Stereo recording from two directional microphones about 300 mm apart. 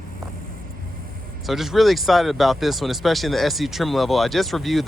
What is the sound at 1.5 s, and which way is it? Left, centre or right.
Speech, centre.